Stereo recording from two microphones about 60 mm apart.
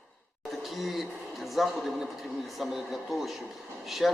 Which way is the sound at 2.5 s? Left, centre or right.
Centre.